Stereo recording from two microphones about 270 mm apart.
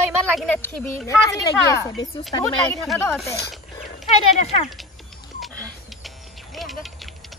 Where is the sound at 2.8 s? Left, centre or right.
Centre.